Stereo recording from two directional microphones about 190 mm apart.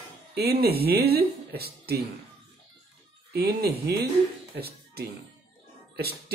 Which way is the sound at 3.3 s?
55° right (ahead or behind).